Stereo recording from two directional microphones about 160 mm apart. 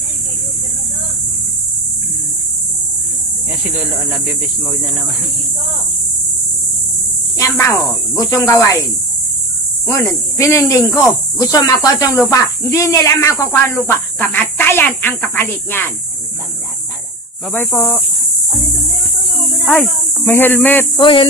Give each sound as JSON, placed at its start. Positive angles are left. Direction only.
{"t": 7.3, "sound": "speech", "side_deg": 15}
{"t": 9.8, "sound": "speech", "side_deg": 15}
{"t": 10.9, "sound": "speech", "side_deg": 0}
{"t": 11.3, "sound": "speech", "side_deg": 20}
{"t": 17.5, "sound": "speech", "side_deg": 10}
{"t": 19.6, "sound": "speech", "side_deg": 10}
{"t": 21.0, "sound": "speech", "side_deg": 30}